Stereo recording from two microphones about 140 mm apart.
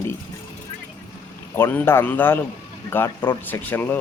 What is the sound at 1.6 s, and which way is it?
A man's voice, 15° left (ahead or behind).